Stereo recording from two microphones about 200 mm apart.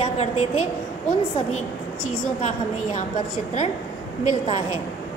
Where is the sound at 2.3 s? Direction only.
35° left (ahead or behind).